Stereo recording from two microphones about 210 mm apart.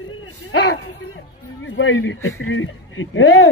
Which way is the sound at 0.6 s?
60° left (ahead or behind).